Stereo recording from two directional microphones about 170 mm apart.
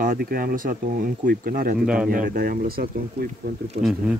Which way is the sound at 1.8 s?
5° right (ahead or behind).